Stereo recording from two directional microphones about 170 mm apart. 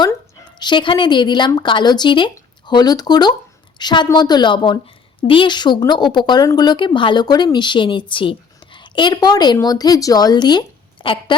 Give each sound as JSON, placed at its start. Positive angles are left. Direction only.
{"t": 0.6, "sound": "speech", "side_deg": 30}